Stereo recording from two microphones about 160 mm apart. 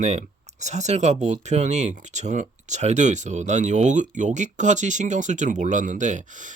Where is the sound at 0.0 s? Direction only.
45° right (ahead or behind).